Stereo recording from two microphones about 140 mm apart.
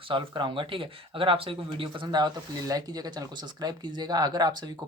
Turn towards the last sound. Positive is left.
turn(degrees=-30)  # may be behind; listen again after turning